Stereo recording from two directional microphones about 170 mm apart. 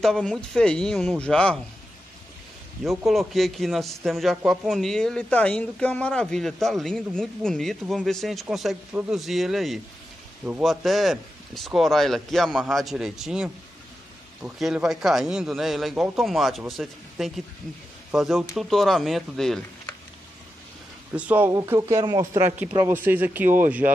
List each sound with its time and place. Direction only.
0.0 s speech: 5° left (ahead or behind)
3.1 s speech: centre (ahead or behind)
21.1 s speech: 10° right (ahead or behind)